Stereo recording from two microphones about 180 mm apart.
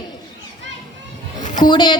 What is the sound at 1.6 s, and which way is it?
Speech, 25° left (ahead or behind).